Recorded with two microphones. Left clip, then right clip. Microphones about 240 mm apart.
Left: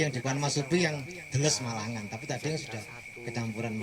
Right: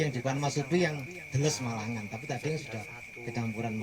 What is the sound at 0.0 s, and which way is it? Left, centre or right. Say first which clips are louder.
Speech: left 1 dB; left.